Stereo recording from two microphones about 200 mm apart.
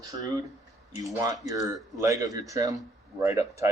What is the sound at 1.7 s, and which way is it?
Speech, 15° right (ahead or behind).